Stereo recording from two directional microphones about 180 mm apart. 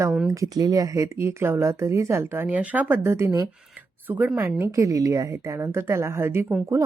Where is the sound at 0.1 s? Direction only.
5° right (ahead or behind).